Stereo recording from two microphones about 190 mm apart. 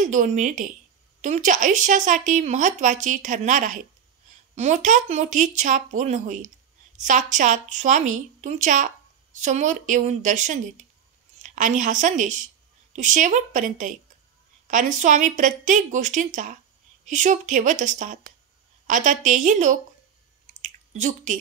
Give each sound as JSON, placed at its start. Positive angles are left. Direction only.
{"t": 0.0, "sound": "a woman's voice", "side_deg": -40}
{"t": 20.6, "sound": "squish", "side_deg": -40}